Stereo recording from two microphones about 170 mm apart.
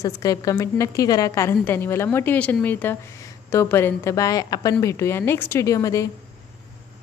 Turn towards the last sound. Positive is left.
turn(degrees=20)  # may be behind; listen again after turning